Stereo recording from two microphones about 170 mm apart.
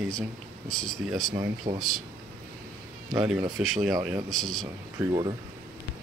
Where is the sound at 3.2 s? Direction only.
5° right (ahead or behind).